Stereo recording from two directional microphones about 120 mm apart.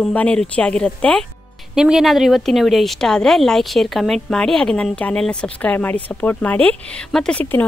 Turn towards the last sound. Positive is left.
turn(degrees=15)  # may be behind; listen again after turning